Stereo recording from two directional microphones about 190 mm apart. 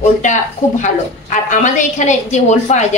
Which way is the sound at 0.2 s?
40° left (ahead or behind).